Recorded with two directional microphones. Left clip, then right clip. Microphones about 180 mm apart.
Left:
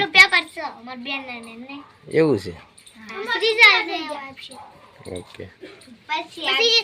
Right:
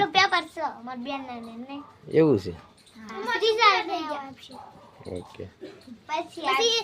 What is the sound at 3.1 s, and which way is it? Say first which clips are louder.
A child's voice: left 3 dB; 15° right (ahead or behind).